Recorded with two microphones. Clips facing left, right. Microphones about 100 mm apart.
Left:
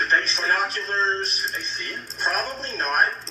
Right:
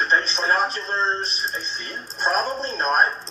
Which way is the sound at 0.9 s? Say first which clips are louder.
Left 2 dB; 15° right (ahead or behind).